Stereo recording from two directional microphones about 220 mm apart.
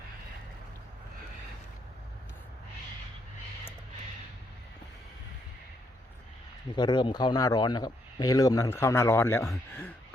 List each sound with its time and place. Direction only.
6.7 s a man's voice: 20° left (ahead or behind)